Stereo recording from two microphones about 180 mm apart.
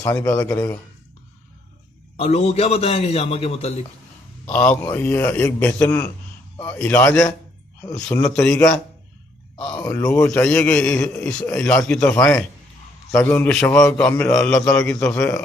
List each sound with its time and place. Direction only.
0.0 s a man's voice: 10° left (ahead or behind)
2.1 s a man's voice: 35° left (ahead or behind)
4.4 s a man's voice: 10° left (ahead or behind)